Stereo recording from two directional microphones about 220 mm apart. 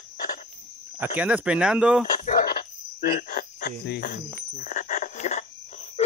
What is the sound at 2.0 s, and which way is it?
Cricket, 40° left (ahead or behind).